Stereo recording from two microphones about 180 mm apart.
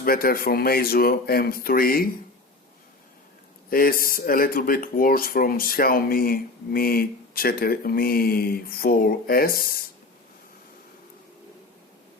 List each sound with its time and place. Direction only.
0.0 s speech: 55° left (ahead or behind)
3.7 s a man's voice: 55° left (ahead or behind)